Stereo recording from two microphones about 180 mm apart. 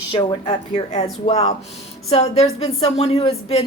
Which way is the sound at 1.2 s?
35° left (ahead or behind).